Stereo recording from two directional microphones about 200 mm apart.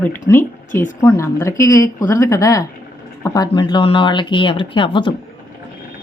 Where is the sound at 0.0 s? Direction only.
10° left (ahead or behind).